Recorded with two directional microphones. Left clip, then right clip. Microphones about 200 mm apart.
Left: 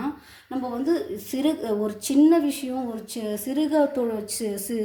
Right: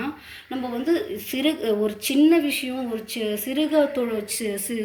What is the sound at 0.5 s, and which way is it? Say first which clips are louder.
A woman's voice: right 1 dB; 30° left (ahead or behind).